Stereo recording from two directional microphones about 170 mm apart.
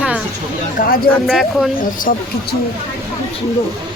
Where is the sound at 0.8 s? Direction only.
60° left (ahead or behind).